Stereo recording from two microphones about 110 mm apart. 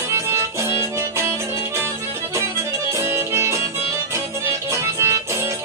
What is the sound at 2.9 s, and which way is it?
Music, 20° right (ahead or behind).